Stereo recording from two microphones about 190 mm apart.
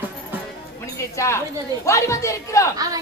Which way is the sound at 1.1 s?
15° left (ahead or behind).